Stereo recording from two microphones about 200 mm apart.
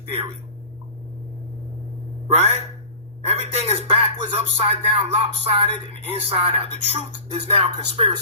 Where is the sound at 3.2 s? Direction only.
30° right (ahead or behind).